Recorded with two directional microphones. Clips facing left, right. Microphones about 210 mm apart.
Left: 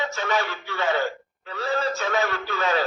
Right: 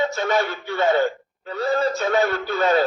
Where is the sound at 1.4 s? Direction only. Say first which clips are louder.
Right 5 dB; 35° right (ahead or behind).